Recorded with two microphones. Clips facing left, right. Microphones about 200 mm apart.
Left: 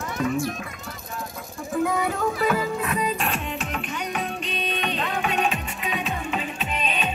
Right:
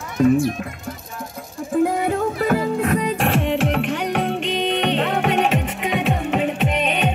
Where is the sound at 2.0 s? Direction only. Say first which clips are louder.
Right 4 dB; 50° right (ahead or behind).